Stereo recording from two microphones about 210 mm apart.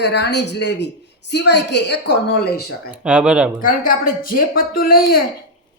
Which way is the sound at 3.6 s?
40° left (ahead or behind).